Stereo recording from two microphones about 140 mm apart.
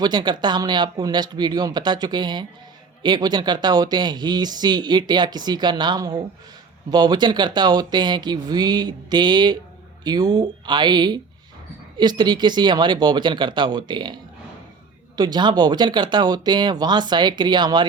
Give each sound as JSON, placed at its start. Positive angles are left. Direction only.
{"t": 0.0, "sound": "speech", "side_deg": -30}